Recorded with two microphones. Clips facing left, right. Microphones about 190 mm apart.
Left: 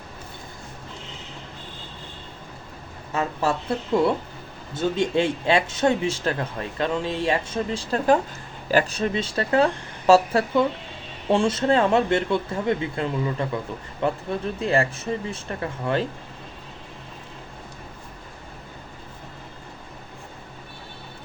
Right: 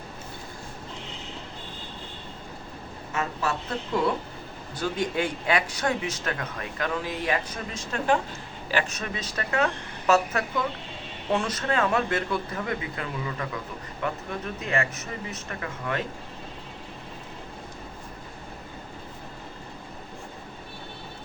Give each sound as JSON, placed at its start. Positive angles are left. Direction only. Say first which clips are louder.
{"t": 3.1, "sound": "speech", "louder": "left 5 dB", "side_deg": 35}
{"t": 4.7, "sound": "speech", "louder": "left 6 dB", "side_deg": 25}